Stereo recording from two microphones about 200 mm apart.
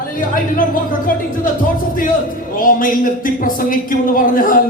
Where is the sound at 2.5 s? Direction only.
45° left (ahead or behind).